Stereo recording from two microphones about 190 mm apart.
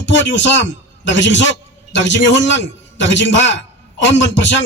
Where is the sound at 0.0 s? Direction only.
75° left (ahead or behind).